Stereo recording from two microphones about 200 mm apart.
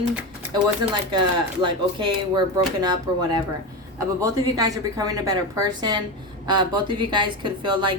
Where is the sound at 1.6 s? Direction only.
25° right (ahead or behind).